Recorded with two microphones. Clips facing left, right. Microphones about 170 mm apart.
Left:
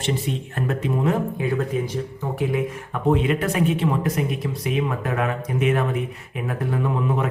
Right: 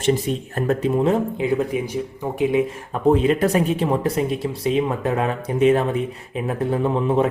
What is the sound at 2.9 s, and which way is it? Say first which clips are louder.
Speech: right 3 dB; 35° right (ahead or behind).